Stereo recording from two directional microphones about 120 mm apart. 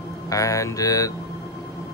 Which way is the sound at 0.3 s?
25° left (ahead or behind).